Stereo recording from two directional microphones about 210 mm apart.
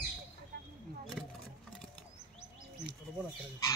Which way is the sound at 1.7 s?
Centre (ahead or behind).